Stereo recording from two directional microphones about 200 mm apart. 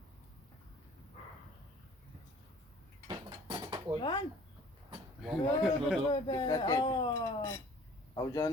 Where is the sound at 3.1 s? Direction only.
25° right (ahead or behind).